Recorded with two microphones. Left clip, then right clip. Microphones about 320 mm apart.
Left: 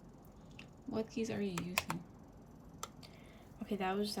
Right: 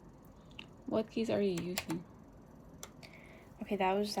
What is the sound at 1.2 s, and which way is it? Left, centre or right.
Speech, centre.